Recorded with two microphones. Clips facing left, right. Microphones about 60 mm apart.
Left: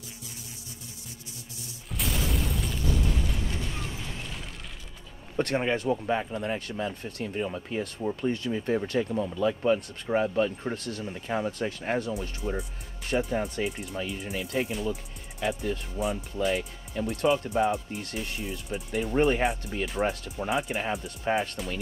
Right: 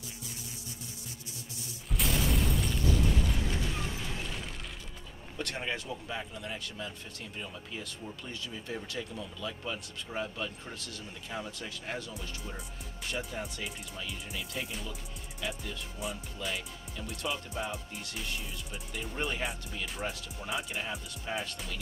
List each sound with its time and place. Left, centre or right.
2.0 s a sound: centre
5.4 s speech: left
12.1 s speech: left
18.7 s speech: left